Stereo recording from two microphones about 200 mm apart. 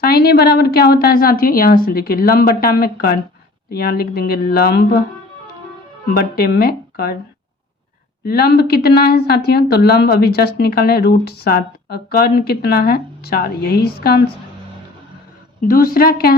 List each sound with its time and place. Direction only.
0.0 s a woman's voice: 50° left (ahead or behind)
6.1 s a woman's voice: 50° left (ahead or behind)
8.2 s a woman's voice: 50° left (ahead or behind)
15.6 s a woman's voice: 45° left (ahead or behind)